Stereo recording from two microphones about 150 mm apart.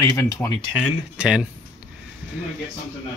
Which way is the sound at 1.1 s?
5° right (ahead or behind).